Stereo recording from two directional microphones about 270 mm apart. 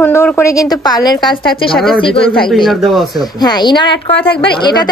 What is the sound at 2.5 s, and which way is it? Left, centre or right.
Speech, centre.